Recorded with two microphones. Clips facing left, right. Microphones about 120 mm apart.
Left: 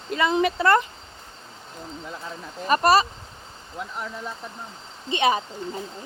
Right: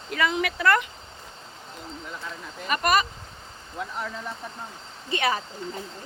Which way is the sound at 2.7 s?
35° left (ahead or behind).